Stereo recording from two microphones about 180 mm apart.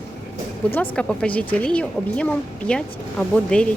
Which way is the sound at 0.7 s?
5° left (ahead or behind).